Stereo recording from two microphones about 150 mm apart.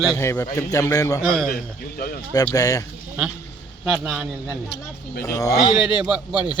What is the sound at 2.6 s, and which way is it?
Speech, 25° left (ahead or behind).